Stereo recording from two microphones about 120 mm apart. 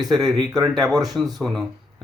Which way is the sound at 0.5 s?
35° right (ahead or behind).